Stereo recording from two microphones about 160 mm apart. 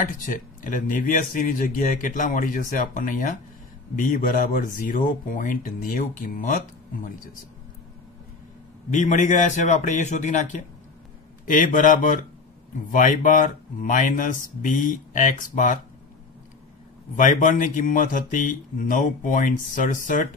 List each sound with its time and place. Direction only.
0.0 s speech: 55° left (ahead or behind)
8.9 s a man's voice: 50° left (ahead or behind)
17.1 s speech: 50° left (ahead or behind)